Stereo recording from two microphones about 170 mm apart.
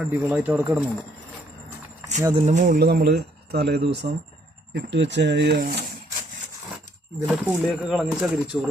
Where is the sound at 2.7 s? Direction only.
70° right (ahead or behind).